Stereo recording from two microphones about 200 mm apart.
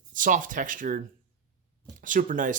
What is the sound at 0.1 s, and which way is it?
Speech, 40° right (ahead or behind).